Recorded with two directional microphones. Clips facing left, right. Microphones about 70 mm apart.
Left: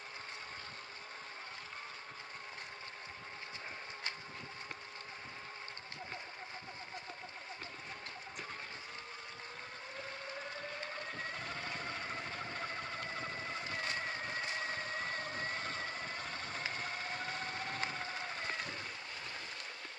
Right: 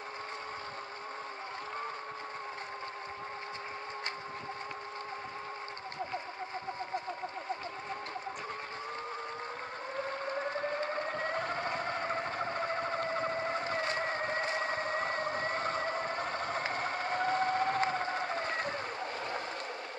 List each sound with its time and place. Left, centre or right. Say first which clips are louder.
10.0 s vehicle: right 10 dB; right